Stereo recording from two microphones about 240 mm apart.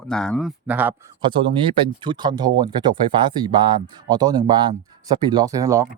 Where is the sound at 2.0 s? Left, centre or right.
Centre.